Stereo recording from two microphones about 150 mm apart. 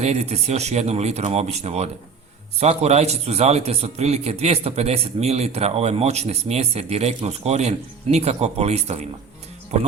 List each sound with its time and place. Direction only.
0.0 s a man's voice: 45° right (ahead or behind)